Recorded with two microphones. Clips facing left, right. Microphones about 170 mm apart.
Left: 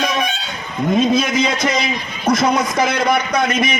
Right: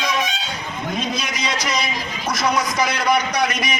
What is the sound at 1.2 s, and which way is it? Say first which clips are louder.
A man's voice: left 8 dB; 50° left (ahead or behind).